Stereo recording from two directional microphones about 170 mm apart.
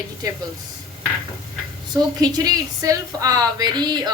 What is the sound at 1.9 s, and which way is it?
A woman's voice, 25° right (ahead or behind).